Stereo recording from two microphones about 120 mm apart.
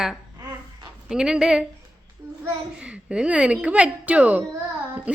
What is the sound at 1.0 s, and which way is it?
A woman's voice, 5° right (ahead or behind).